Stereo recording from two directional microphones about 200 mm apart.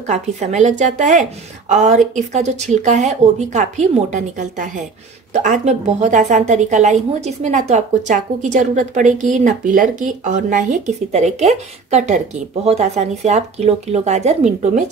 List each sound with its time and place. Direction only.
0.0 s a woman's voice: 35° right (ahead or behind)